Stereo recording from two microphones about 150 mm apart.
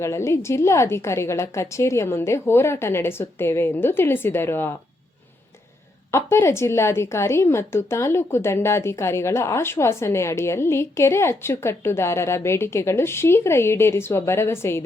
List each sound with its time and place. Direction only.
0.0 s a woman's voice: 20° left (ahead or behind)
6.1 s a woman's voice: 15° left (ahead or behind)